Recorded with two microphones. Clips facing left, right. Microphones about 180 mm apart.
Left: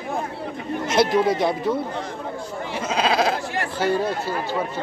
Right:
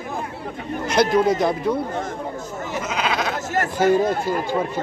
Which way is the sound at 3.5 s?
45° right (ahead or behind).